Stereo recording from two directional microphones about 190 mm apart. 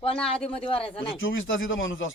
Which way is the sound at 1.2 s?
90° left.